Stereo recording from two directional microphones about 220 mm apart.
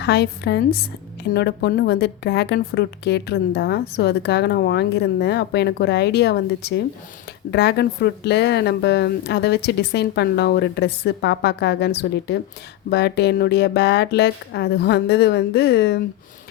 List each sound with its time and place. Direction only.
0.0 s a woman's voice: 50° left (ahead or behind)